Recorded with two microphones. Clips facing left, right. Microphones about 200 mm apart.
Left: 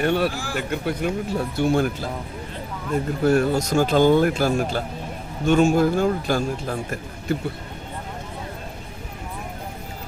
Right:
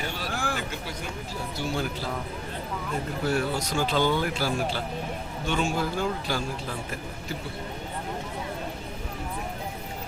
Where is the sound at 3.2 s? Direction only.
45° left (ahead or behind).